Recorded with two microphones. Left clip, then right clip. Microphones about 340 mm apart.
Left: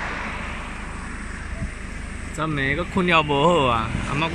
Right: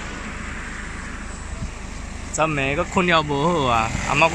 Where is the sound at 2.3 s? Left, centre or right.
Centre.